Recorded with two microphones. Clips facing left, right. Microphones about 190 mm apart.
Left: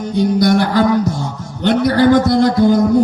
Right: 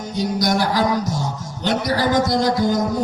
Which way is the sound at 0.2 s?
55° left (ahead or behind).